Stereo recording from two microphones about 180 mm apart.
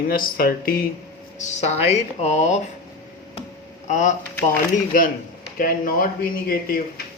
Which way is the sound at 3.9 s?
45° left (ahead or behind).